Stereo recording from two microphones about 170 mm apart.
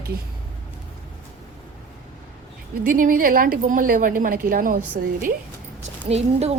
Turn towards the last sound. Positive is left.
turn(degrees=-40)  # may be behind; listen again after turning